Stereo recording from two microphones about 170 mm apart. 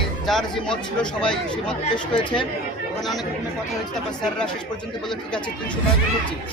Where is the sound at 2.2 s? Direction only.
30° left (ahead or behind).